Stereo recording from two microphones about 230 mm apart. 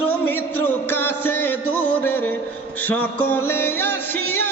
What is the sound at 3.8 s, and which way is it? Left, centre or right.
Music, left.